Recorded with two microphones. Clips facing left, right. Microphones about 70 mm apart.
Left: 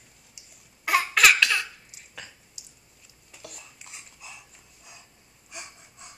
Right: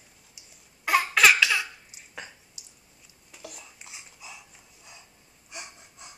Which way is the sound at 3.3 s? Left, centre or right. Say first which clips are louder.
Right 1 dB; centre.